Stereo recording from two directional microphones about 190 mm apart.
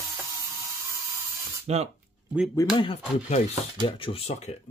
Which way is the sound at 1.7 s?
35° right (ahead or behind).